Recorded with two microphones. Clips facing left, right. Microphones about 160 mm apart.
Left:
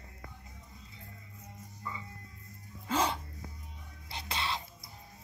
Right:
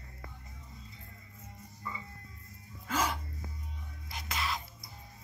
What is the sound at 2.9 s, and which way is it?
Music, 30° left (ahead or behind).